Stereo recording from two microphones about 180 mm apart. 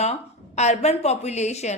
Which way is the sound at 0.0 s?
40° left (ahead or behind).